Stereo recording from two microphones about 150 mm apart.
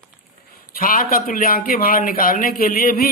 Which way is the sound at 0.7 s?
70° left (ahead or behind).